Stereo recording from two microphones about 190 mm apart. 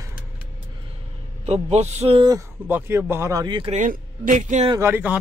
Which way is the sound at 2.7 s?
10° right (ahead or behind).